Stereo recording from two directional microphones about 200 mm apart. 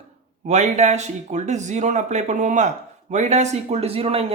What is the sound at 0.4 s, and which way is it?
Speech, 35° right (ahead or behind).